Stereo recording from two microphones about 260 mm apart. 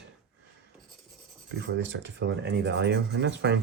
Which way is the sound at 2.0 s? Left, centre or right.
Right.